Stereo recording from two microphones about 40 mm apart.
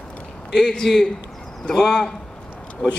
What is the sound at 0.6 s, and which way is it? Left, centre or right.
A man's voice, centre.